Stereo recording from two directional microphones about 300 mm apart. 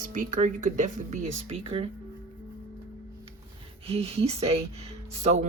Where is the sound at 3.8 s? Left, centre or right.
Centre.